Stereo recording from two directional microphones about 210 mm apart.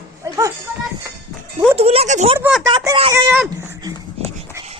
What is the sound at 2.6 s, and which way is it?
Speech, 20° right (ahead or behind).